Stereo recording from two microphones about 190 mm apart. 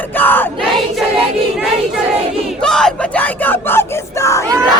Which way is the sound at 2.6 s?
5° left (ahead or behind).